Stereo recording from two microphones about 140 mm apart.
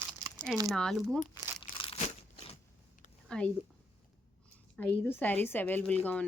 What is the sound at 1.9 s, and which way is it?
Crunch, 50° left (ahead or behind).